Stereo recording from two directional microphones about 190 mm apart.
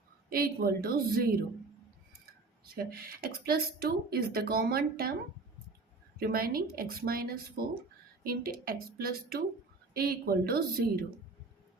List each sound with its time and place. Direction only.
0.3 s speech: 50° right (ahead or behind)
2.7 s speech: 50° right (ahead or behind)
6.1 s speech: 55° right (ahead or behind)